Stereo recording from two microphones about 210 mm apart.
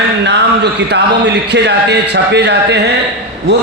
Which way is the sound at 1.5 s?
55° right (ahead or behind).